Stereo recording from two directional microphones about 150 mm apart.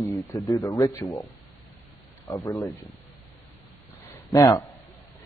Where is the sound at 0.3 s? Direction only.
25° left (ahead or behind).